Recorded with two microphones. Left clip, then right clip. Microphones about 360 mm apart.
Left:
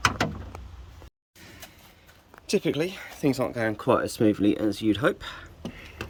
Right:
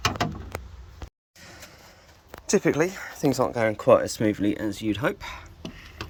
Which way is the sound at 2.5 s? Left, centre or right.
Centre.